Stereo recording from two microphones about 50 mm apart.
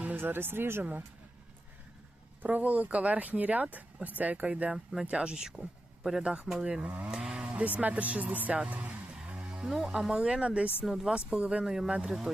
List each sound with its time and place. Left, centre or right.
0.2 s speech: right
2.4 s speech: right
4.7 s speech: centre
6.0 s a man's voice: centre
6.2 s speech: centre
7.4 s speech: right
9.2 s speech: right
10.8 s speech: centre
11.1 s speech: centre